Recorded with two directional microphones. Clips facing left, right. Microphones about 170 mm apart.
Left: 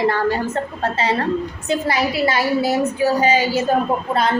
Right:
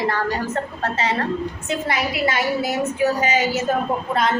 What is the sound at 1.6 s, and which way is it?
A woman's voice, 35° left (ahead or behind).